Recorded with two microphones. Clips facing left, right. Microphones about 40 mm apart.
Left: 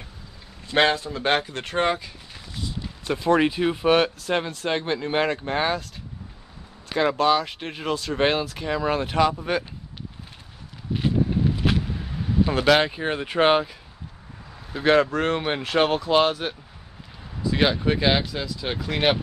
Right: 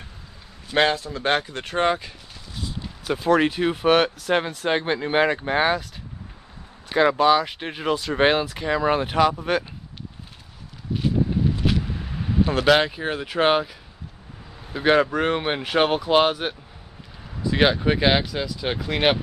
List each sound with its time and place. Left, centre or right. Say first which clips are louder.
0.7 s speech: even; centre
1.1 s speech: even; centre
3.5 s speech: right 1 dB; centre
6.9 s speech: right 3 dB; centre
10.9 s a sound: even; centre
11.8 s a sound: even; centre
12.4 s speech: right 1 dB; centre
14.7 s speech: even; centre